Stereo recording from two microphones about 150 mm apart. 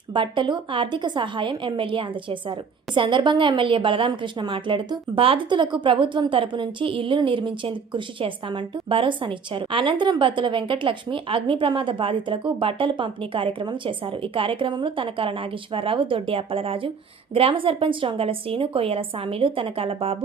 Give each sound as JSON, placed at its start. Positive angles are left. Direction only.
{"t": 0.1, "sound": "a woman's voice", "side_deg": -30}